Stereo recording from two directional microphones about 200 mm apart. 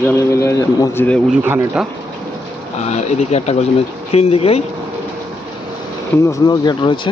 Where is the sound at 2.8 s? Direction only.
35° left (ahead or behind).